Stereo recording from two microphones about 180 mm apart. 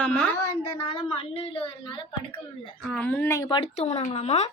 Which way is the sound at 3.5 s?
35° left (ahead or behind).